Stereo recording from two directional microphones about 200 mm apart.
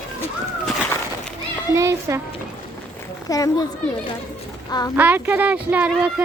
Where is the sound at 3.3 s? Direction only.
15° left (ahead or behind).